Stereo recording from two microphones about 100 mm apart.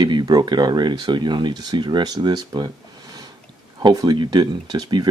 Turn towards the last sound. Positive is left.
turn(degrees=-45)  # may be behind; listen again after turning